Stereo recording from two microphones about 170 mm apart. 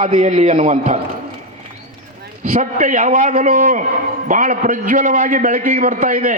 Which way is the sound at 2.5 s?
50° right (ahead or behind).